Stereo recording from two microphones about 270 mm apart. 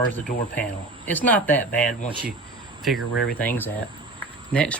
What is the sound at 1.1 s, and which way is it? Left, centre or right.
Speech, centre.